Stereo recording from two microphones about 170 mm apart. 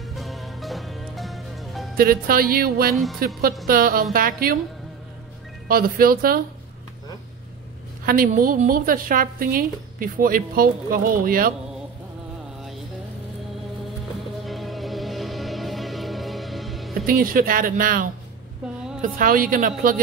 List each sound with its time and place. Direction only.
0.1 s music: centre (ahead or behind)
2.0 s a woman's voice: 60° right (ahead or behind)
2.9 s speech: centre (ahead or behind)
3.6 s a woman's voice: 60° right (ahead or behind)
5.7 s a woman's voice: 60° right (ahead or behind)
8.0 s a woman's voice: 60° right (ahead or behind)
14.4 s music: centre (ahead or behind)
16.9 s a woman's voice: 60° right (ahead or behind)